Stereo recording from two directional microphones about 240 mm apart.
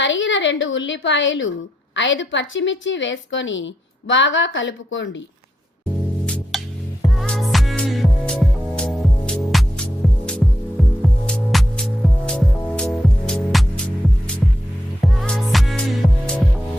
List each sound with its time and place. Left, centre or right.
0.0 s a woman's voice: left
6.2 s music: centre
15.0 s music: centre